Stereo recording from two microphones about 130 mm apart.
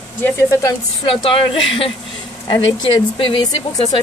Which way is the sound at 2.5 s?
35° left (ahead or behind).